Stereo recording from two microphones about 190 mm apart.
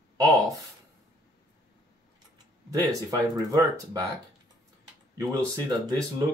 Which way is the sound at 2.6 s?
20° right (ahead or behind).